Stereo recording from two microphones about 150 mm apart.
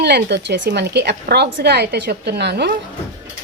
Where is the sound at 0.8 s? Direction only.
90° right.